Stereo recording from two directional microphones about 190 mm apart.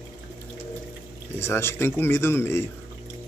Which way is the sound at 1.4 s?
15° left (ahead or behind).